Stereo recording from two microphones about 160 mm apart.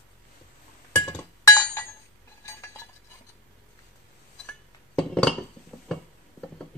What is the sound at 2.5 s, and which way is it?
Chink, 15° left (ahead or behind).